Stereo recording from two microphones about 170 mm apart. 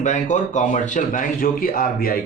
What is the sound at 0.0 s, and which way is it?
Speech, 45° left (ahead or behind).